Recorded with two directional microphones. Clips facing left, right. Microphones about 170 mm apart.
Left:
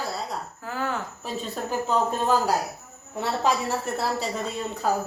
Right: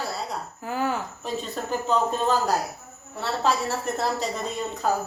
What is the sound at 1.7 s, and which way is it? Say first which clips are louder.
A woman's voice: right 1 dB; 10° left (ahead or behind).